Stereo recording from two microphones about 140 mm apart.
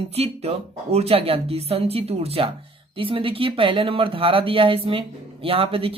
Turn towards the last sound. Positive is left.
turn(degrees=-40)  # may be behind; listen again after turning